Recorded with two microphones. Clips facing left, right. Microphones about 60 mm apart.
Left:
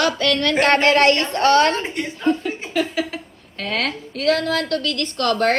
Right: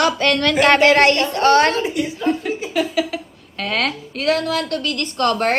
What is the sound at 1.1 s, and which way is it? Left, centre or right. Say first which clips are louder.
Speech: right 2 dB; left.